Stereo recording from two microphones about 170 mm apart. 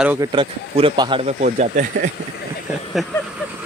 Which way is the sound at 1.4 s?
50° right (ahead or behind).